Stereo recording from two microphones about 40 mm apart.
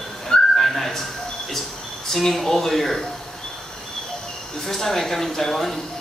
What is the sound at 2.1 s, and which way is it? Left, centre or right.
Speech, centre.